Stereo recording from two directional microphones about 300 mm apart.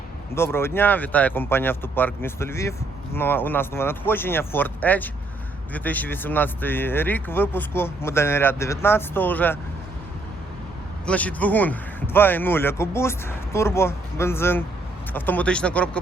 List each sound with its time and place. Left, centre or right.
0.3 s speech: centre
11.0 s speech: centre